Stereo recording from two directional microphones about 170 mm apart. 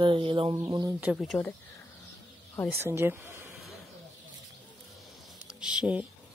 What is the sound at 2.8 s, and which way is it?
Speech, 15° right (ahead or behind).